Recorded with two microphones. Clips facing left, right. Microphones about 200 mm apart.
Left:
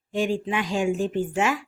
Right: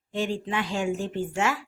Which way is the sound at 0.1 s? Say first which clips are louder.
Left 4 dB; 15° left (ahead or behind).